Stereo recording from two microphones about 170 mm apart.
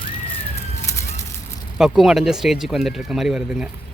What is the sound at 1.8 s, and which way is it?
Speech, centre (ahead or behind).